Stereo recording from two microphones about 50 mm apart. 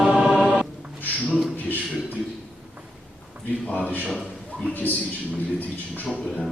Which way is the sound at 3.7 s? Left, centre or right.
Left.